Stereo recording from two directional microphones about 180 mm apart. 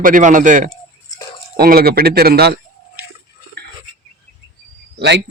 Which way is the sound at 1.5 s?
55° right (ahead or behind).